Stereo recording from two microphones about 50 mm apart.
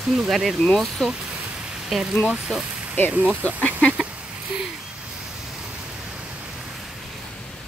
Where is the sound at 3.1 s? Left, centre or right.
Right.